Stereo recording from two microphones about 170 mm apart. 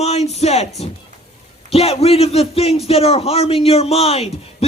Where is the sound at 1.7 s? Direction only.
35° left (ahead or behind).